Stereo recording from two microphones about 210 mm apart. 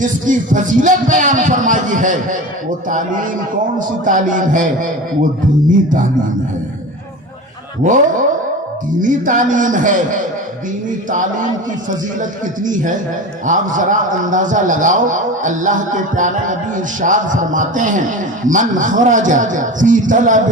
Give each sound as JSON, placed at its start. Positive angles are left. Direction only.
{"t": 0.0, "sound": "a man's voice", "side_deg": -35}
{"t": 3.8, "sound": "a man's voice", "side_deg": -40}
{"t": 7.9, "sound": "a man's voice", "side_deg": -40}